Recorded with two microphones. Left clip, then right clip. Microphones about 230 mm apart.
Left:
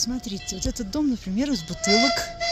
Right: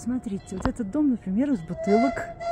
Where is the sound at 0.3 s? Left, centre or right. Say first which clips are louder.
Left 3 dB; right.